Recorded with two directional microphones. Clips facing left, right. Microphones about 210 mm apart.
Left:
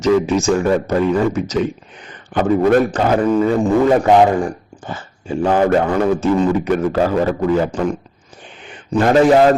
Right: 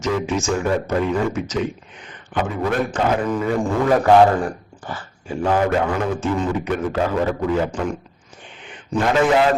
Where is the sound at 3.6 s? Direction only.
20° left (ahead or behind).